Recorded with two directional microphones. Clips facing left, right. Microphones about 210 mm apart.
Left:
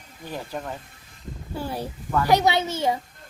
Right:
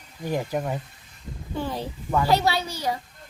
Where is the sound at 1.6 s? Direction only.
10° left (ahead or behind).